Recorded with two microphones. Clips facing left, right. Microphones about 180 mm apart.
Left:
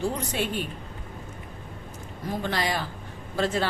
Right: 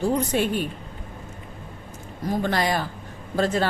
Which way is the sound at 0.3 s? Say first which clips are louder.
Right 6 dB; 50° right (ahead or behind).